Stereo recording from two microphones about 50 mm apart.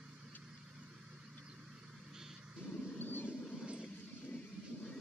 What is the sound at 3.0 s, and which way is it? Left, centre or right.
Vehicle, left.